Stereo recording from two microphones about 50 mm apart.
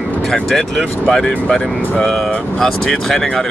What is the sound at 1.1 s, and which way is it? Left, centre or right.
Speech, centre.